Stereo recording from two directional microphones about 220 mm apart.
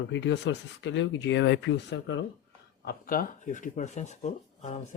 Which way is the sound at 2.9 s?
40° left (ahead or behind).